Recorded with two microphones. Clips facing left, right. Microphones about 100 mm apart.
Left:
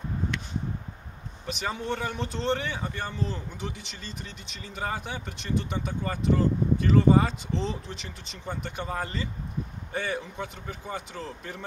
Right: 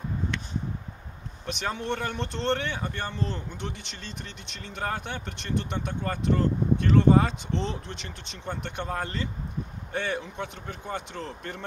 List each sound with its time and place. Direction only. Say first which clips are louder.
1.4 s speech: right 1 dB; centre (ahead or behind)